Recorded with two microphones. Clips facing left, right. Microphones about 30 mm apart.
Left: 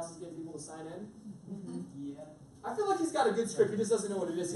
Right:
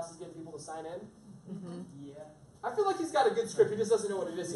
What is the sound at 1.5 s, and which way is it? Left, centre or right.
Speech, right.